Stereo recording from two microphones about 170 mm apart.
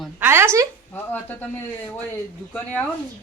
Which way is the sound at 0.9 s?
10° left (ahead or behind).